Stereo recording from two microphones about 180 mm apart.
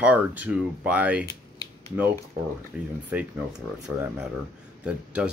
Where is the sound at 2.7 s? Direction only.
5° right (ahead or behind).